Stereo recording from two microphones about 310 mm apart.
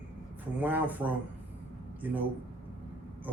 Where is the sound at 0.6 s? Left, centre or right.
Centre.